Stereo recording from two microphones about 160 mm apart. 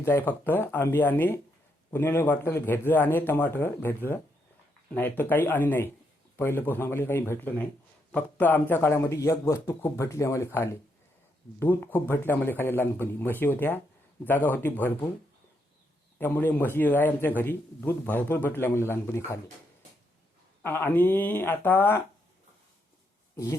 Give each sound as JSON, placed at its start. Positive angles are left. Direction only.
{"t": 0.0, "sound": "a man's voice", "side_deg": 15}
{"t": 16.1, "sound": "a man's voice", "side_deg": 15}
{"t": 20.6, "sound": "a man's voice", "side_deg": 15}